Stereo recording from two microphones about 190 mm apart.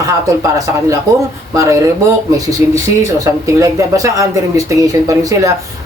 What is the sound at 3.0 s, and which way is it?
Speech, 15° right (ahead or behind).